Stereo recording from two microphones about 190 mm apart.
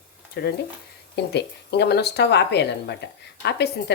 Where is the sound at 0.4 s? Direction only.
55° left (ahead or behind).